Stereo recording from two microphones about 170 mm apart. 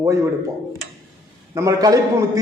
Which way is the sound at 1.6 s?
20° right (ahead or behind).